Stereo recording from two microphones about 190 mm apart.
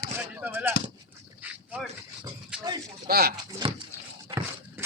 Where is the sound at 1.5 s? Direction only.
5° right (ahead or behind).